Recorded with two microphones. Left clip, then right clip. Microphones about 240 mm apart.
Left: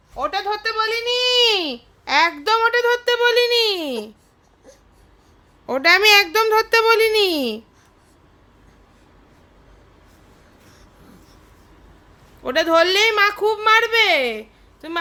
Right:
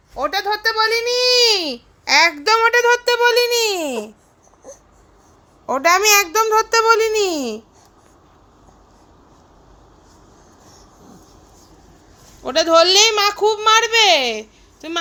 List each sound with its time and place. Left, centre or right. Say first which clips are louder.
0.2 s a child's voice: right 3 dB; centre
5.6 s a child's voice: even; centre
12.4 s a child's voice: right 3 dB; centre